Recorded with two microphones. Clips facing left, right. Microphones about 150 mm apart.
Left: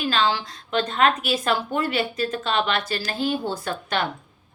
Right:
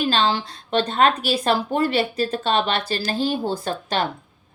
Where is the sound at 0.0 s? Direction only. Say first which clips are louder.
Right 2 dB; 30° right (ahead or behind).